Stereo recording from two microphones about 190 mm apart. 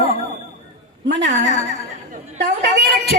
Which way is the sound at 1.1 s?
65° right (ahead or behind).